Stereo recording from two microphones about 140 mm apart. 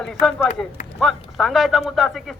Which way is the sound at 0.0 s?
5° left (ahead or behind).